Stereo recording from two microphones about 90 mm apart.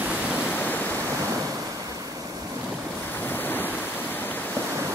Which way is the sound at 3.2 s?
20° left (ahead or behind).